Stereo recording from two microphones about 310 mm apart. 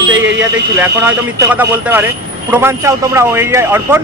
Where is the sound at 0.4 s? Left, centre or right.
Centre.